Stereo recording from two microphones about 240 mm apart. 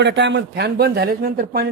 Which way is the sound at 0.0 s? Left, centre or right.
Right.